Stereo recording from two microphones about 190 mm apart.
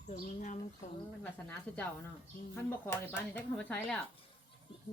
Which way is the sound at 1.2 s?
10° left (ahead or behind).